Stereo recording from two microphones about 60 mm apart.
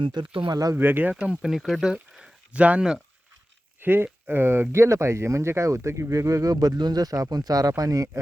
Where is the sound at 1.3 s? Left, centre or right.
Centre.